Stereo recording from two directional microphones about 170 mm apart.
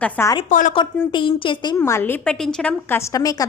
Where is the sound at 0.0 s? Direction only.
15° left (ahead or behind).